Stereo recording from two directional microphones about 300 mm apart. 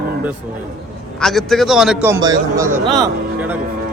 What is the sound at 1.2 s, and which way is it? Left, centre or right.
A man's voice, centre.